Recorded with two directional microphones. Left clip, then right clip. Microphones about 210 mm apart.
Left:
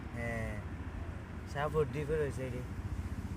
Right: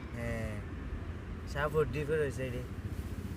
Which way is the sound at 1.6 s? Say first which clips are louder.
Right 2 dB; 10° right (ahead or behind).